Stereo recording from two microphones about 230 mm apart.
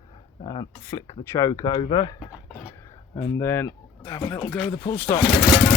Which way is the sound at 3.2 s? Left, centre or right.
Centre.